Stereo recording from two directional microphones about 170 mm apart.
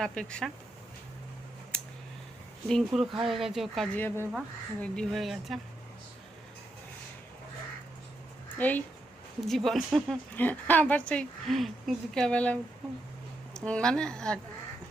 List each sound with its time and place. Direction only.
0.0 s speech: 5° left (ahead or behind)
1.7 s a sound: 5° left (ahead or behind)
2.6 s speech: centre (ahead or behind)
3.9 s speech: 10° left (ahead or behind)
8.5 s speech: 10° left (ahead or behind)